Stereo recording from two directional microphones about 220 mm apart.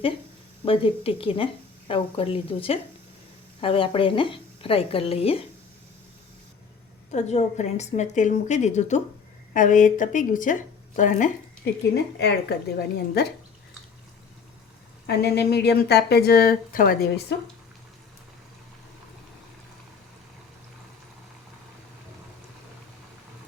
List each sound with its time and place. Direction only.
0.6 s a woman's voice: 25° left (ahead or behind)
7.1 s a woman's voice: 30° left (ahead or behind); by 13.2 s 45° left (ahead or behind)
15.0 s speech: 45° left (ahead or behind)